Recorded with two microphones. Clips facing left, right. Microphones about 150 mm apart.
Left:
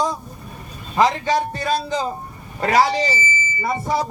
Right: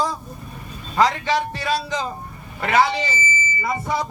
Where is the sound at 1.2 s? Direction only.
40° left (ahead or behind).